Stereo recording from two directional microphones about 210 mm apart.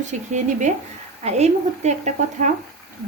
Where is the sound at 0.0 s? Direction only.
35° right (ahead or behind).